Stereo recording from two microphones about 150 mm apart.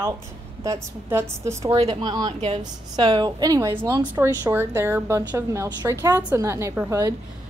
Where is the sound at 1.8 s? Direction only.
30° right (ahead or behind).